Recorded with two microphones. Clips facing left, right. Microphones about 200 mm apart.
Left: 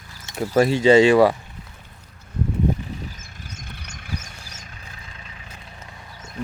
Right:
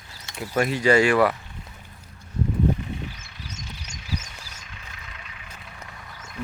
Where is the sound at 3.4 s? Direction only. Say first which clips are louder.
Right 1 dB; 55° left (ahead or behind).